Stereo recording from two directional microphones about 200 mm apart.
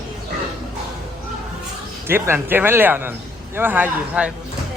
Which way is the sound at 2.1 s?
10° right (ahead or behind).